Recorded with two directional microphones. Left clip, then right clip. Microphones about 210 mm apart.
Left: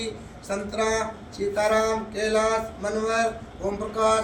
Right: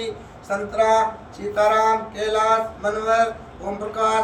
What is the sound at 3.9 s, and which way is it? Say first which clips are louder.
Speech: right 2 dB; 20° left (ahead or behind).